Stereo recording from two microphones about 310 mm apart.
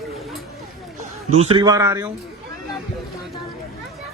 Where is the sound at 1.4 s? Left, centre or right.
Centre.